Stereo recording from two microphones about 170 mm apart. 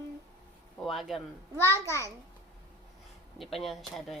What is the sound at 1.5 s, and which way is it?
Speech, 15° left (ahead or behind).